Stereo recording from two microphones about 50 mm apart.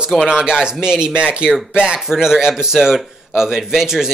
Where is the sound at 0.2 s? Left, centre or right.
Centre.